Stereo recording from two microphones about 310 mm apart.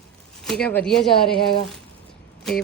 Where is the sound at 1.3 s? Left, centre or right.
Centre.